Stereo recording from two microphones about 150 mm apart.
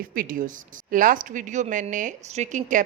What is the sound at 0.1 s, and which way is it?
A woman's voice, 70° right (ahead or behind).